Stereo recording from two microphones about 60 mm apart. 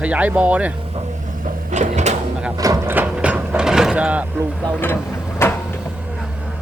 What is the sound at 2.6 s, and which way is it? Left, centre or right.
Speech, right.